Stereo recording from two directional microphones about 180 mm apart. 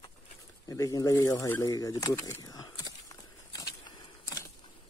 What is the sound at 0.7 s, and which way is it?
Speech, 20° left (ahead or behind).